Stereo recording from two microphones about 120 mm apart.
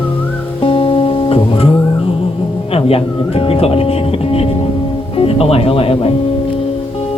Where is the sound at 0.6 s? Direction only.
50° left (ahead or behind).